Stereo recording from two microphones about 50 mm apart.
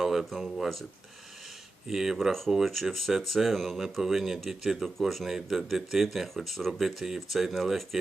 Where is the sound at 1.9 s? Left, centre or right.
Centre.